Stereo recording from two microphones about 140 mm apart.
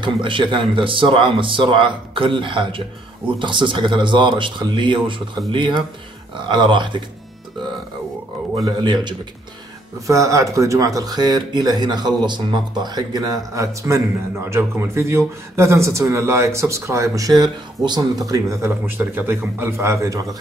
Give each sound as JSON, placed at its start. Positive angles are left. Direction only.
{"t": 0.0, "sound": "speech", "side_deg": -35}
{"t": 8.5, "sound": "speech", "side_deg": -30}